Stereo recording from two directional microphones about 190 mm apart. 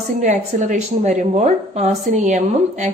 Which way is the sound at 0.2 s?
40° right (ahead or behind).